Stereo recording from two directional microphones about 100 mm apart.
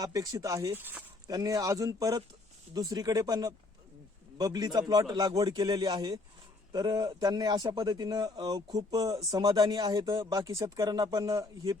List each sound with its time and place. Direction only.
0.0 s speech: 35° right (ahead or behind); by 1.0 s 20° right (ahead or behind)
1.3 s a man's voice: 35° right (ahead or behind)
10.2 s speech: 35° right (ahead or behind)